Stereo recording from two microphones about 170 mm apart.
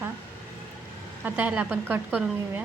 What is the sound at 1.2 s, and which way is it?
A woman's voice, 10° right (ahead or behind).